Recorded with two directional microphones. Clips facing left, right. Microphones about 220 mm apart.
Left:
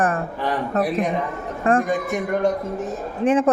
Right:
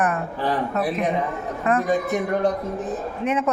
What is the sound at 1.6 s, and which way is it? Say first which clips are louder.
Speech: left 3 dB; 30° left (ahead or behind).